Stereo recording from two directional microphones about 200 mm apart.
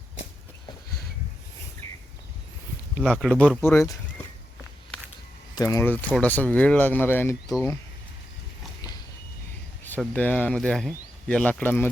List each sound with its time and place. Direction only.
3.0 s speech: 5° left (ahead or behind)
5.5 s speech: 15° left (ahead or behind)
9.8 s speech: 5° left (ahead or behind)